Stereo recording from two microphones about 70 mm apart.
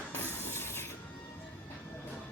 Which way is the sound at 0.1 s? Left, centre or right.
Left.